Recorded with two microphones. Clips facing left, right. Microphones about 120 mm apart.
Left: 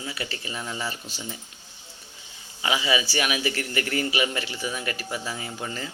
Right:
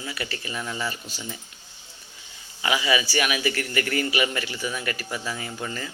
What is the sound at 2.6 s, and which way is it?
Speech, 25° left (ahead or behind).